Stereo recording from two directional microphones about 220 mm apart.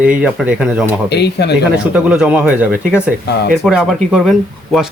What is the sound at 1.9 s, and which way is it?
Speech, 5° right (ahead or behind).